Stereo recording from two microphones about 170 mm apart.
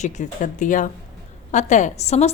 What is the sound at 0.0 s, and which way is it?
A woman's voice, 45° left (ahead or behind).